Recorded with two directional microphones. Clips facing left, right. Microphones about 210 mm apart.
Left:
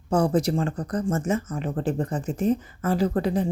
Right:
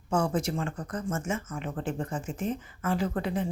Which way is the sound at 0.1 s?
35° left (ahead or behind).